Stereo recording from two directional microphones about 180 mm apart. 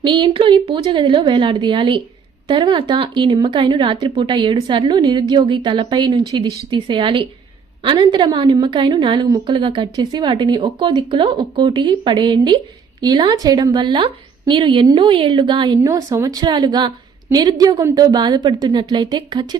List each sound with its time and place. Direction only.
0.0 s a woman's voice: 25° right (ahead or behind)